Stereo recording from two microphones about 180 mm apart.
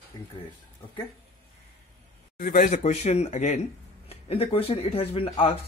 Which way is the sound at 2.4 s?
50° left (ahead or behind).